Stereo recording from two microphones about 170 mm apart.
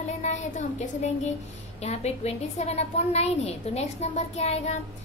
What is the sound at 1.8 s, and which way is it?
A woman's voice, 40° left (ahead or behind).